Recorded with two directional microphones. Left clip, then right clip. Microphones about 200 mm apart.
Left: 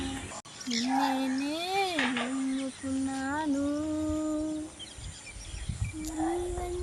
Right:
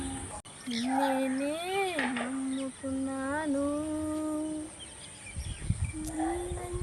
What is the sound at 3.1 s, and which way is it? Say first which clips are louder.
Child singing: even; 20° right (ahead or behind).